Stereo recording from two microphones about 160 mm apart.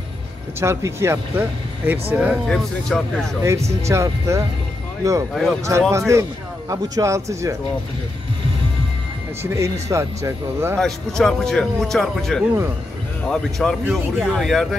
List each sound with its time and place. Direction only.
0.6 s speech: 15° right (ahead or behind)
2.1 s speech: 5° right (ahead or behind)
3.8 s speech: 20° right (ahead or behind)
5.3 s speech: 5° left (ahead or behind)
5.6 s speech: 20° right (ahead or behind)
9.4 s speech: 20° right (ahead or behind)
10.8 s speech: 5° left (ahead or behind)